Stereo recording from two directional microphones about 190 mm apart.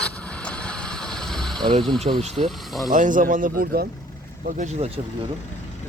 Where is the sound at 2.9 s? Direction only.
45° right (ahead or behind).